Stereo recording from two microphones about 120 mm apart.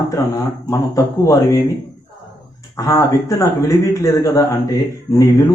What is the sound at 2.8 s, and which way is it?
Speech, 25° left (ahead or behind).